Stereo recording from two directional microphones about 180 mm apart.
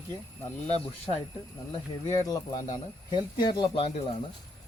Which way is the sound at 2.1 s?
20° left (ahead or behind).